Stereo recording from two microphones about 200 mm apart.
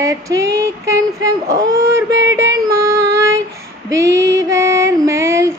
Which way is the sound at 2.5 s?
15° right (ahead or behind).